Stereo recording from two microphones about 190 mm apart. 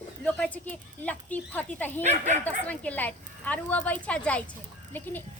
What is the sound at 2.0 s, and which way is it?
Speech, 40° right (ahead or behind).